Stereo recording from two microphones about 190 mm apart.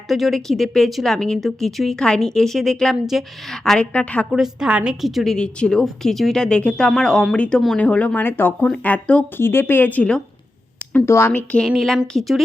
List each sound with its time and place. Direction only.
0.1 s a woman's voice: centre (ahead or behind)